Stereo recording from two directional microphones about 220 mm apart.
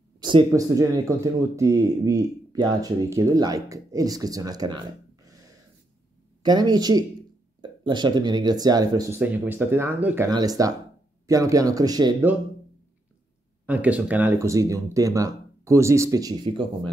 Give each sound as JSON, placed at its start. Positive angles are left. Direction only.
{"t": 0.2, "sound": "speech", "side_deg": -15}
{"t": 6.4, "sound": "speech", "side_deg": -20}
{"t": 13.7, "sound": "speech", "side_deg": -5}